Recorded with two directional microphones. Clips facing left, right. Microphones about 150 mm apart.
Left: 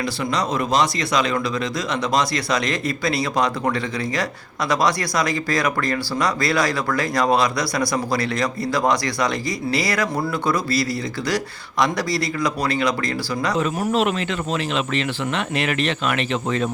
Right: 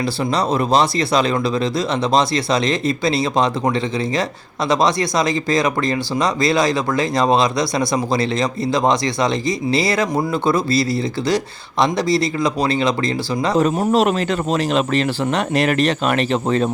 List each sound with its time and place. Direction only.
0.0 s speech: 30° right (ahead or behind)
13.9 s speech: 40° right (ahead or behind)